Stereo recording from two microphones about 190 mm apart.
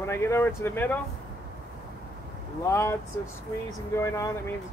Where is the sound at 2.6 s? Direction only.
15° left (ahead or behind).